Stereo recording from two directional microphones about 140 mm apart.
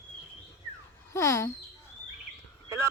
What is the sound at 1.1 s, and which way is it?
Speech, 20° left (ahead or behind).